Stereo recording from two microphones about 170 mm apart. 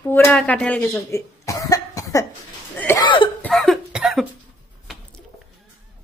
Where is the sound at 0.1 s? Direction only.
10° left (ahead or behind).